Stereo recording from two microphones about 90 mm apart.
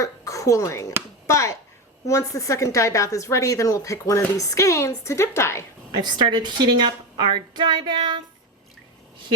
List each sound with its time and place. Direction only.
0.0 s speech: 40° left (ahead or behind)
6.0 s a woman's voice: 55° right (ahead or behind)